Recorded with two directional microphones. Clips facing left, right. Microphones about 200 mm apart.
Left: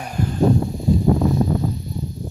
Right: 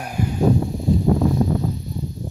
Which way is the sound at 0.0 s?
10° right (ahead or behind).